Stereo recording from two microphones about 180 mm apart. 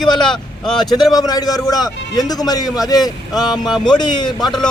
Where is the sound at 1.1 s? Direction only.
20° left (ahead or behind).